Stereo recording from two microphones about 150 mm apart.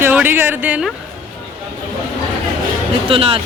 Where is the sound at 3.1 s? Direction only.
40° right (ahead or behind).